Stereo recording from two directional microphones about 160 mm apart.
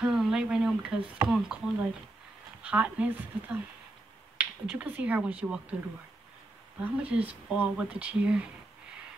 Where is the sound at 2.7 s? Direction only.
10° right (ahead or behind).